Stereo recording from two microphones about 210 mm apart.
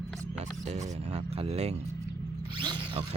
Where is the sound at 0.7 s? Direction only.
30° right (ahead or behind).